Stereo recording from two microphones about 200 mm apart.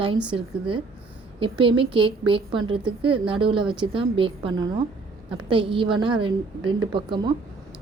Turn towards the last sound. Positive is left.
turn(degrees=-25)  # may be behind; listen again after turning